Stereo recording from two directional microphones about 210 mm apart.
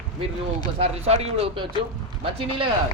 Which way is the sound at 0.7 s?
30° right (ahead or behind).